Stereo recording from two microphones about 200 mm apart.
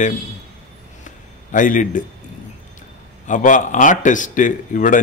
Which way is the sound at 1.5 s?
40° left (ahead or behind).